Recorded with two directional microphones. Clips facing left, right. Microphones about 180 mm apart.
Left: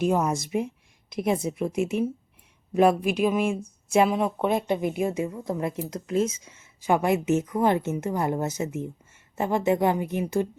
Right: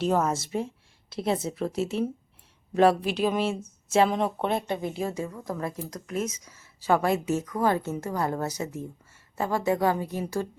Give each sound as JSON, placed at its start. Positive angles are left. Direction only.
{"t": 0.0, "sound": "a woman's voice", "side_deg": 15}